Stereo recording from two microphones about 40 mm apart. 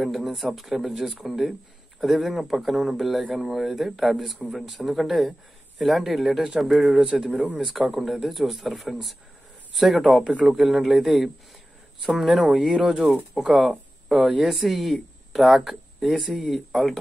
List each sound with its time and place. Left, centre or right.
0.0 s speech: centre
7.0 s speech: right
7.5 s speech: centre
12.8 s speech: right
13.1 s speech: centre